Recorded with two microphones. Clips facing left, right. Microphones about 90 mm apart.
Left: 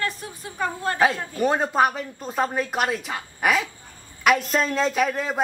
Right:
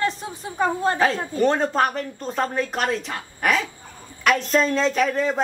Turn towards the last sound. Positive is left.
turn(degrees=5)  # may be behind; listen again after turning